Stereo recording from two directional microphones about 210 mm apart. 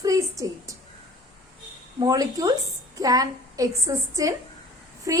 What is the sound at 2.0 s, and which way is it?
A woman's voice, 15° right (ahead or behind).